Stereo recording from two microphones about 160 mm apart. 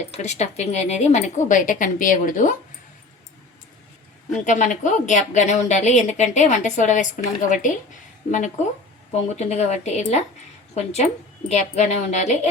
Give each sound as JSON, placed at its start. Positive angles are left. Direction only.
{"t": 0.1, "sound": "a woman's voice", "side_deg": 45}
{"t": 4.3, "sound": "a woman's voice", "side_deg": 50}
{"t": 9.3, "sound": "a woman's voice", "side_deg": 45}
{"t": 11.4, "sound": "a woman's voice", "side_deg": 45}